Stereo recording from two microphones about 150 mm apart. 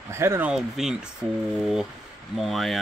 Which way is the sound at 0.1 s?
15° right (ahead or behind).